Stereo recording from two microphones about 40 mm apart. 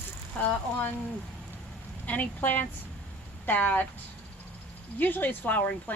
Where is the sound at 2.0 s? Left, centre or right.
Left.